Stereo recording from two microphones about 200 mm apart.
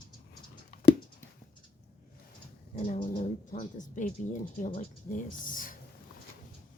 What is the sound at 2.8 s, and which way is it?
Bird, 30° left (ahead or behind).